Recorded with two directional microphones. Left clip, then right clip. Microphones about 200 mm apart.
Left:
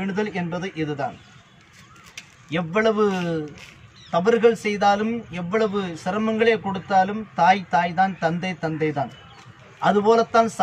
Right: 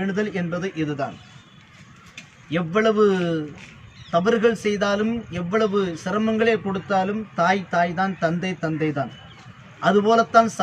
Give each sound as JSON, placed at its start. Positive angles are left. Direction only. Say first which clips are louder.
{"t": 0.0, "sound": "speech", "louder": "right 1 dB", "side_deg": -5}
{"t": 2.5, "sound": "a man's voice", "louder": "right 1 dB", "side_deg": -5}